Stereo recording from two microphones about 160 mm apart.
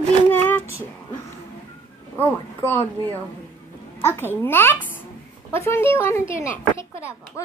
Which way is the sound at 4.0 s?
15° left (ahead or behind).